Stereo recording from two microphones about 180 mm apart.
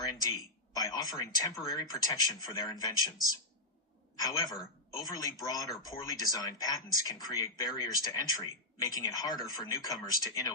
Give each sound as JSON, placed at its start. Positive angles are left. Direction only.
{"t": 0.7, "sound": "speech", "side_deg": 20}
{"t": 4.2, "sound": "speech", "side_deg": 20}